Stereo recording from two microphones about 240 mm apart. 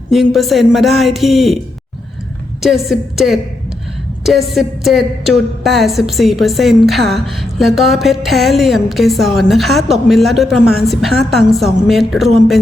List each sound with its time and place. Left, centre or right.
0.1 s speech: centre
2.6 s speech: centre